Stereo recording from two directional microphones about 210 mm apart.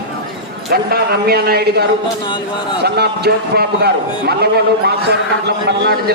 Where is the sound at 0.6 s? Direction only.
45° right (ahead or behind).